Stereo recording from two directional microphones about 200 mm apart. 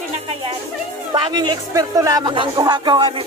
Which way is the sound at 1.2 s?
20° right (ahead or behind).